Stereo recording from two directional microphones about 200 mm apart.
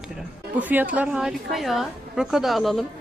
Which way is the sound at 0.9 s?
5° right (ahead or behind).